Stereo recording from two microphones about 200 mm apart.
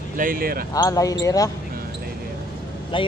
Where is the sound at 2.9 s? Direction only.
25° left (ahead or behind).